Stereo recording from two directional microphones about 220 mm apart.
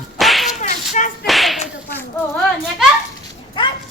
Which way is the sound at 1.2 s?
Centre (ahead or behind).